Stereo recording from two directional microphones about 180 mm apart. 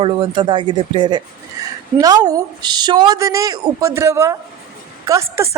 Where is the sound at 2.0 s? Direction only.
20° right (ahead or behind).